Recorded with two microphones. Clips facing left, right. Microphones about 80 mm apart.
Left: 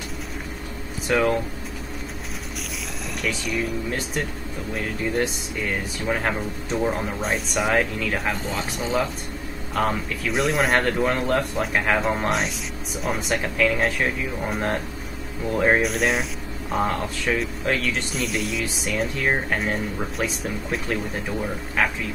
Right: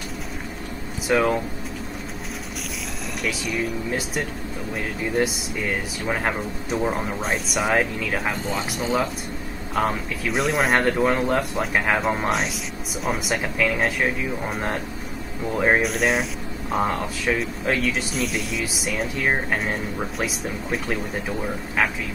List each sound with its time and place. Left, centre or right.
1.0 s speech: centre
3.2 s speech: centre
6.0 s speech: centre